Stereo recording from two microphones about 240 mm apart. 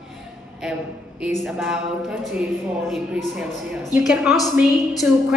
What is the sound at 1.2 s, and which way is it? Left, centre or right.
A woman's voice, centre.